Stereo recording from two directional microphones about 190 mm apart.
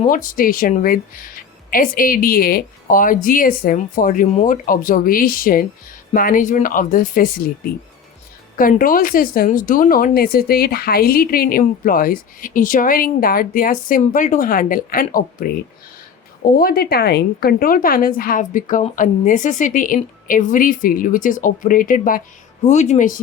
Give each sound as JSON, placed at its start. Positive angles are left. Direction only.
{"t": 0.0, "sound": "a woman's voice", "side_deg": 45}
{"t": 16.6, "sound": "a woman's voice", "side_deg": 50}